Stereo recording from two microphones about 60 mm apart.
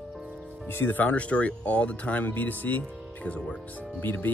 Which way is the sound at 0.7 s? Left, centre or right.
Left.